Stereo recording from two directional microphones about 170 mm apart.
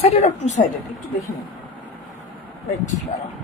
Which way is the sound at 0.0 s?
40° left (ahead or behind).